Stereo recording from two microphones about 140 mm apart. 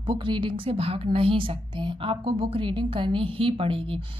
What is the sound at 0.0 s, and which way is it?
A woman's voice, 35° right (ahead or behind).